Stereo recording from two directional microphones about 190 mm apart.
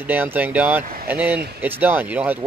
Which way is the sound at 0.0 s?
10° right (ahead or behind).